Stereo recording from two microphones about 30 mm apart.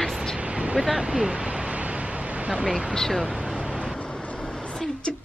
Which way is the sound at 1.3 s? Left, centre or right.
Right.